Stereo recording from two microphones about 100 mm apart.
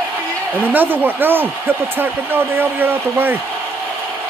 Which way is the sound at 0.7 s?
20° right (ahead or behind).